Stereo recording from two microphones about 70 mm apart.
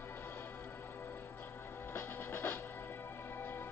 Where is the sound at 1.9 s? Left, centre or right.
Left.